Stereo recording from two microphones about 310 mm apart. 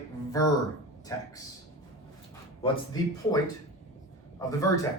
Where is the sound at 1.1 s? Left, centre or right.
Centre.